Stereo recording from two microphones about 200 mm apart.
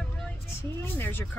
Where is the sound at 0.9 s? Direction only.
10° left (ahead or behind).